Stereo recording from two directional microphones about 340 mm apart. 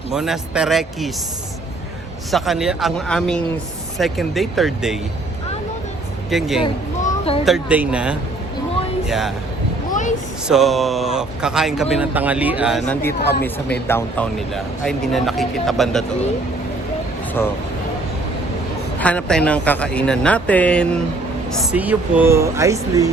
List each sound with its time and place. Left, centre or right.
0.1 s speech: centre
2.3 s speech: centre
6.3 s speech: centre
7.0 s a sound: centre
7.4 s speech: centre
10.5 s speech: centre
18.9 s speech: centre